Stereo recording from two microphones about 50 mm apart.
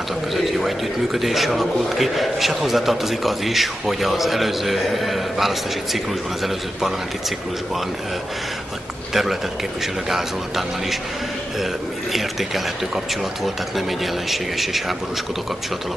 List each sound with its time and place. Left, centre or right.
0.3 s a man's voice: centre
9.1 s a man's voice: centre
12.1 s a man's voice: centre